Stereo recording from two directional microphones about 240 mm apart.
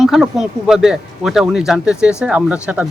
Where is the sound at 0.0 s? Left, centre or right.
Centre.